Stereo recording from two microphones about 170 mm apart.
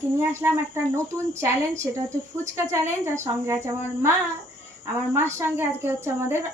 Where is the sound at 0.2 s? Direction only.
15° right (ahead or behind).